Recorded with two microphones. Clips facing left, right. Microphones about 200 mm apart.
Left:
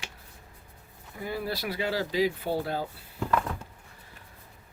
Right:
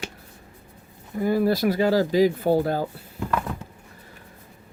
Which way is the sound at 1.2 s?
45° right (ahead or behind).